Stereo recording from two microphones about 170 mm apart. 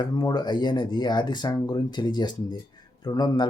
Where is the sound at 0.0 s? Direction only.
25° left (ahead or behind).